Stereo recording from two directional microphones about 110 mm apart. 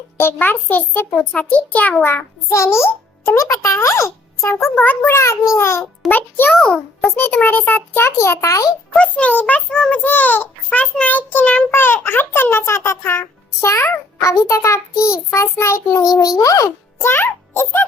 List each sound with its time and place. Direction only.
0.2 s a child's voice: 20° left (ahead or behind)
9.0 s a child's voice: 10° left (ahead or behind); by 16.6 s 30° left (ahead or behind)
16.6 s a child's voice: 20° left (ahead or behind)